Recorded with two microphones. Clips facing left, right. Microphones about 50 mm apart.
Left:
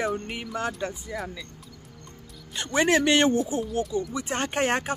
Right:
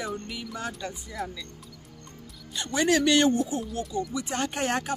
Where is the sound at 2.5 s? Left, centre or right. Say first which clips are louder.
Left 2 dB; left.